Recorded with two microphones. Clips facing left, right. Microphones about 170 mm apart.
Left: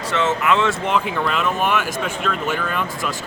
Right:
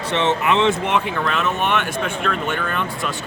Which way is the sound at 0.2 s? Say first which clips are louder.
Even; 20° right (ahead or behind).